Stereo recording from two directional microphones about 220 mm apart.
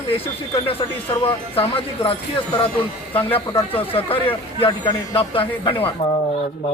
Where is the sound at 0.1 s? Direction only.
25° left (ahead or behind).